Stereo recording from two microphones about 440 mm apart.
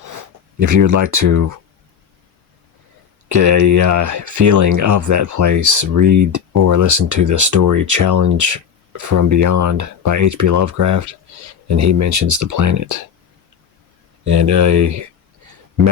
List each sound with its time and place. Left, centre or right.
0.0 s speech: right
3.2 s speech: right
14.3 s speech: right